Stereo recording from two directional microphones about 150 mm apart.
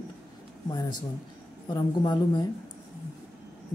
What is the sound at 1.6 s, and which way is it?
Speech, 30° left (ahead or behind).